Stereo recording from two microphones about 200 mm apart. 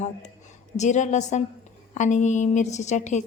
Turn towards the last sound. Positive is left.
turn(degrees=35)  # may be behind; listen again after turning